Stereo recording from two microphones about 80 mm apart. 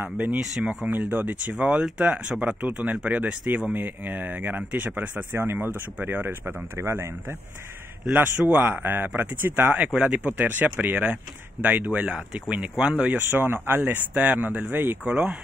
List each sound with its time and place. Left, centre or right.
0.0 s speech: right
8.1 s speech: right